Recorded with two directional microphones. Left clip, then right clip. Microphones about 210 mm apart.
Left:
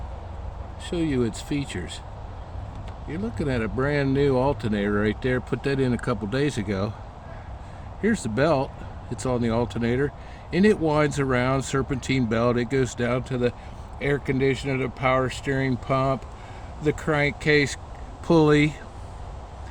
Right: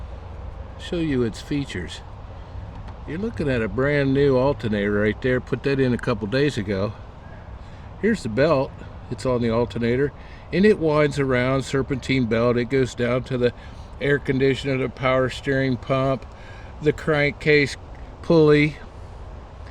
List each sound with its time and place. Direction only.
0.8 s speech: 20° right (ahead or behind)
3.1 s speech: 15° right (ahead or behind)
8.0 s speech: 10° right (ahead or behind)